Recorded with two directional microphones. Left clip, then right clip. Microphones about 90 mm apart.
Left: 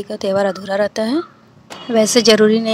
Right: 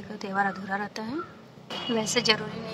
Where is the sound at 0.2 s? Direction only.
30° left (ahead or behind).